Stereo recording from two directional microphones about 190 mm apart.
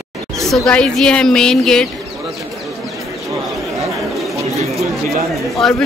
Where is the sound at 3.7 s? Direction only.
Centre (ahead or behind).